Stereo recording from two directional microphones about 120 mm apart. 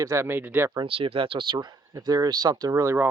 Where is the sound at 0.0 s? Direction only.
25° right (ahead or behind).